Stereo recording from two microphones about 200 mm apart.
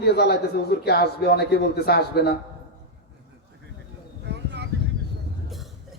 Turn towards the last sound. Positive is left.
turn(degrees=-60)  # may be behind; listen again after turning